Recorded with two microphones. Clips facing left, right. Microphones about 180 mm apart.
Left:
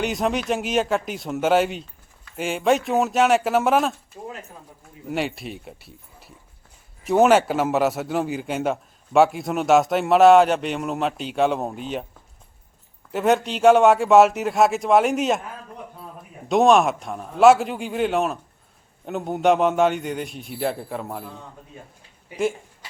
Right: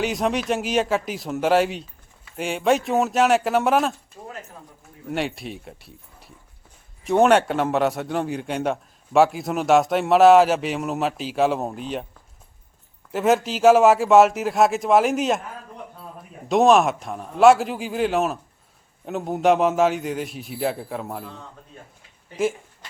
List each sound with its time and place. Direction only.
0.0 s a man's voice: centre (ahead or behind)
4.1 s a sound: 25° left (ahead or behind)
5.0 s a man's voice: centre (ahead or behind)
13.1 s a man's voice: centre (ahead or behind)
16.5 s a man's voice: centre (ahead or behind)
22.4 s a sound: centre (ahead or behind)